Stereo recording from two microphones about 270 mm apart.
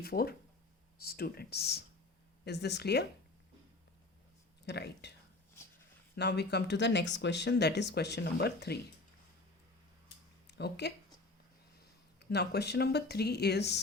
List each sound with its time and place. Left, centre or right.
0.0 s speech: left
4.6 s speech: left
6.1 s speech: left
10.4 s speech: left
12.3 s speech: left